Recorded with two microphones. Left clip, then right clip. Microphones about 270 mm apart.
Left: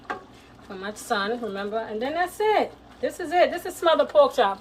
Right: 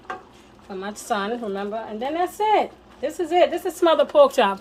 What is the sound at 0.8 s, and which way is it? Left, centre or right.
Speech, right.